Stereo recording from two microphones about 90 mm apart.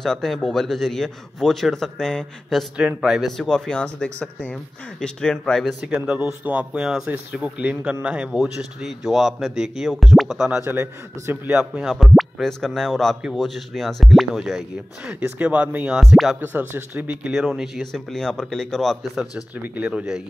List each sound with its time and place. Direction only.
0.0 s a man's voice: 5° left (ahead or behind)
5.9 s a man's voice: 20° right (ahead or behind)
10.6 s a man's voice: 25° right (ahead or behind)
11.5 s a man's voice: 10° right (ahead or behind)
11.9 s a man's voice: centre (ahead or behind)
15.1 s a man's voice: 20° right (ahead or behind)
16.3 s a man's voice: 20° right (ahead or behind)
17.6 s a man's voice: centre (ahead or behind)
19.5 s a man's voice: 20° right (ahead or behind)